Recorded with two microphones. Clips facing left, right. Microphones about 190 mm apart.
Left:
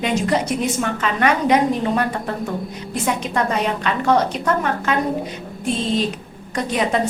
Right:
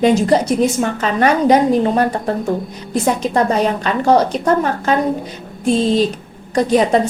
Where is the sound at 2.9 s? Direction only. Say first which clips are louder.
Right 6 dB; 35° right (ahead or behind).